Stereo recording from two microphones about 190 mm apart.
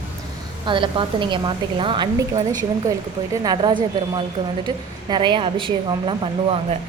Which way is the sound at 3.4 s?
25° right (ahead or behind).